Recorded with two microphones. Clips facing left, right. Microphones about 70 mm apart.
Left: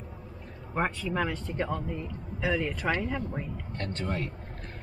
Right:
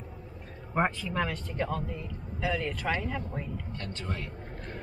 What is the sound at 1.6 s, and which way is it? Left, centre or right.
Speech, centre.